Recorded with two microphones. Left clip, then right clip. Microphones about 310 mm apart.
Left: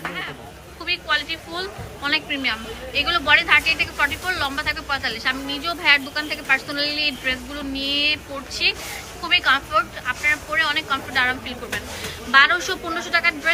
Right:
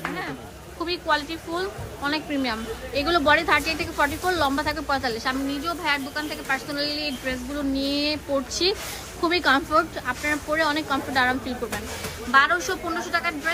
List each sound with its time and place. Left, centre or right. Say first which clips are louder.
0.9 s a woman's voice: left 3 dB; centre